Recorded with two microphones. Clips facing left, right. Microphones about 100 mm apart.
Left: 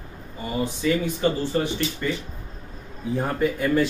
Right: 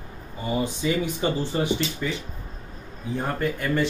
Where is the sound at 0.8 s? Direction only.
15° right (ahead or behind).